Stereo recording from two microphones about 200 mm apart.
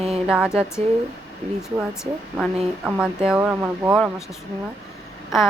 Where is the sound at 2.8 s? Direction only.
5° right (ahead or behind).